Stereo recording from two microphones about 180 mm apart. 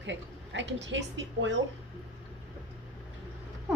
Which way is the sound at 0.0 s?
90° right.